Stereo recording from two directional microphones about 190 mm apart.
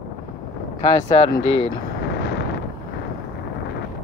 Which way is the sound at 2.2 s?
65° left (ahead or behind).